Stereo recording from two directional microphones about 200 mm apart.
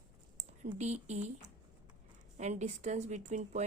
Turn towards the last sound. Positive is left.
turn(degrees=-35)  # may be behind; listen again after turning